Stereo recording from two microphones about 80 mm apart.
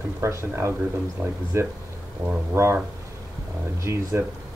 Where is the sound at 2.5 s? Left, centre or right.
Right.